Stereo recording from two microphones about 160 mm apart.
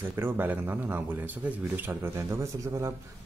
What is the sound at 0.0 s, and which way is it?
A man's voice, 15° right (ahead or behind).